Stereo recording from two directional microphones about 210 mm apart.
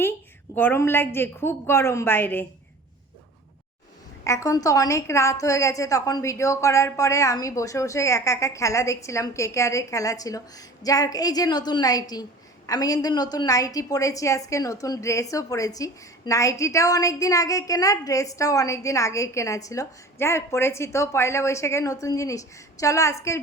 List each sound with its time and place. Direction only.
0.5 s a woman's voice: 10° left (ahead or behind)
4.2 s a woman's voice: 15° left (ahead or behind)